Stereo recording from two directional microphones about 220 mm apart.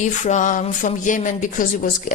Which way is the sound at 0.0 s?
35° left (ahead or behind).